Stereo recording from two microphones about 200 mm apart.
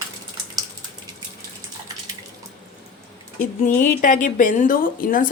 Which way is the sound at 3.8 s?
40° left (ahead or behind).